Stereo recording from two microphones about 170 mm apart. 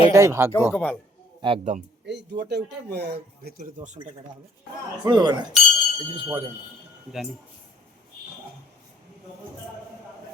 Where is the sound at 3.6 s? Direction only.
45° right (ahead or behind).